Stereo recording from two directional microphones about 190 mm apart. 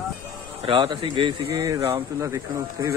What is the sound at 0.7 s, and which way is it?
Speech, 25° right (ahead or behind).